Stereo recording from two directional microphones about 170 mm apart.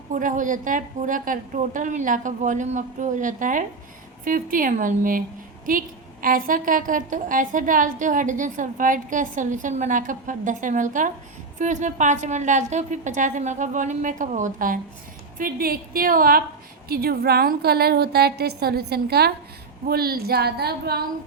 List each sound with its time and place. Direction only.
0.1 s a woman's voice: 50° right (ahead or behind)
6.2 s a woman's voice: 55° right (ahead or behind)